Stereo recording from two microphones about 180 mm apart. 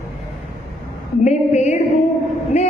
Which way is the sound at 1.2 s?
40° left (ahead or behind).